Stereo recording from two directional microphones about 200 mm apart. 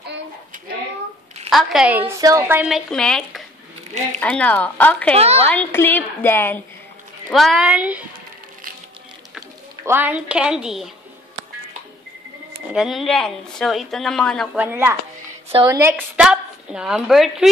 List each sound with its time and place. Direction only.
1.5 s a woman's voice: 5° right (ahead or behind)
2.9 s a woman's voice: 5° left (ahead or behind)
5.1 s speech: 30° right (ahead or behind)
5.5 s a woman's voice: 10° left (ahead or behind)
7.2 s a woman's voice: centre (ahead or behind)
9.8 s a woman's voice: 10° right (ahead or behind)
12.7 s a woman's voice: centre (ahead or behind)